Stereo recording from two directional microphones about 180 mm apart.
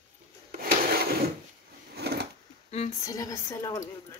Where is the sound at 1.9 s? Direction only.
65° right (ahead or behind).